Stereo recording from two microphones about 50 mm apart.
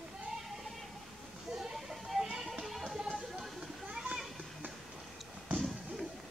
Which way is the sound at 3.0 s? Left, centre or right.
Centre.